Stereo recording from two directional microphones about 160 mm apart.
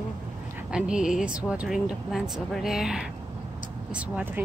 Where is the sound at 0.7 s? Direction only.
5° right (ahead or behind).